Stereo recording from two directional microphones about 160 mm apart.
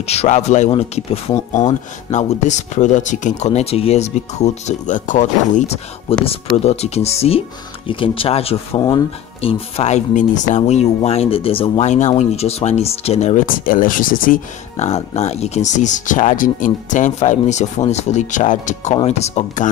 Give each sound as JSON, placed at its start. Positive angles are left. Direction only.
{"t": 0.0, "sound": "speech", "side_deg": 40}
{"t": 14.9, "sound": "speech", "side_deg": 40}